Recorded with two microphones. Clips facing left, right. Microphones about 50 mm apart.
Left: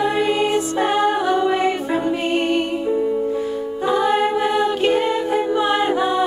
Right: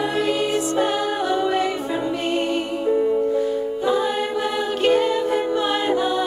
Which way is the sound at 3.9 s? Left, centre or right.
Left.